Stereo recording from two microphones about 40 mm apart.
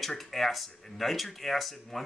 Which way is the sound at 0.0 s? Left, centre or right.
Centre.